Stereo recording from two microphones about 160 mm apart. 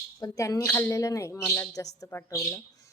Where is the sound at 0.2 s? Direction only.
20° left (ahead or behind).